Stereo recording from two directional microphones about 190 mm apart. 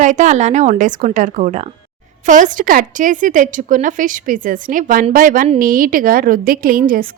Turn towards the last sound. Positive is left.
turn(degrees=-50)  # may be behind; listen again after turning